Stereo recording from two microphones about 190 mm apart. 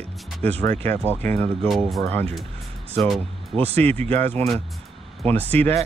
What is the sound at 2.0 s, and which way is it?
Speech, 10° left (ahead or behind).